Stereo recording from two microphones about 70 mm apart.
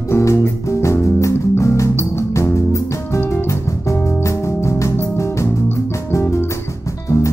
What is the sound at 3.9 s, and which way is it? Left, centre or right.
Music, left.